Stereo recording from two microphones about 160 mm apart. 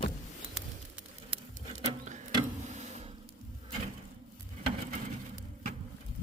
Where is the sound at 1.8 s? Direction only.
50° right (ahead or behind).